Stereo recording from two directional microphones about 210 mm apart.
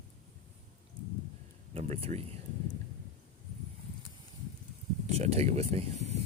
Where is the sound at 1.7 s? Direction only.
30° right (ahead or behind).